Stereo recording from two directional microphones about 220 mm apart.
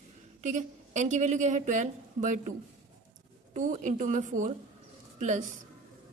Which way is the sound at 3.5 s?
35° right (ahead or behind).